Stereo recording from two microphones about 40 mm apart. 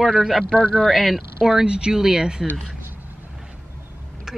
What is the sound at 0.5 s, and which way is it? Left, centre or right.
Speech, centre.